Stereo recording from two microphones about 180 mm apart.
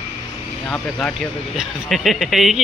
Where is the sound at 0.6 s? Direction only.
5° left (ahead or behind).